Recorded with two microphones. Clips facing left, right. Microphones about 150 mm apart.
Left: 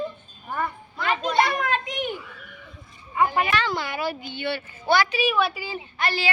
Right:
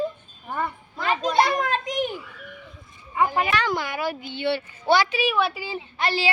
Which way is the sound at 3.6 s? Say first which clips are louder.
Right 1 dB; 15° right (ahead or behind).